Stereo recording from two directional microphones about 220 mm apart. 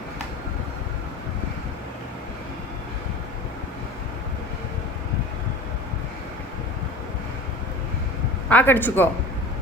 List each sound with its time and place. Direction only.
8.4 s speech: 10° left (ahead or behind)